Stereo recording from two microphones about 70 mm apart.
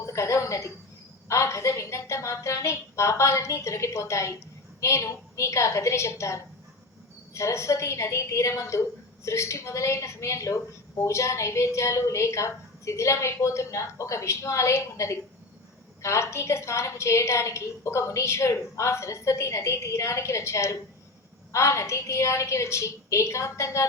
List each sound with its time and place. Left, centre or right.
0.0 s a woman's voice: left